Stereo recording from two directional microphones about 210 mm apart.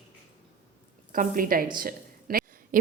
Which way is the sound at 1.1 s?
40° right (ahead or behind).